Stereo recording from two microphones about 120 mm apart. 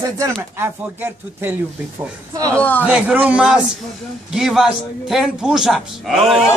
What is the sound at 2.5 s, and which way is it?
Speech, 15° left (ahead or behind).